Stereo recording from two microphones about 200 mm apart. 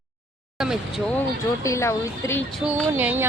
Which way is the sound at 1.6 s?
15° left (ahead or behind).